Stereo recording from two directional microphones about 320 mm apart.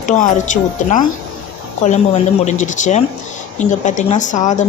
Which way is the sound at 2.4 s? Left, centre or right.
Left.